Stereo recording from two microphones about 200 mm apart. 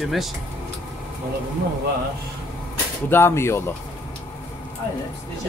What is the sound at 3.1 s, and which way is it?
Speech, 10° left (ahead or behind).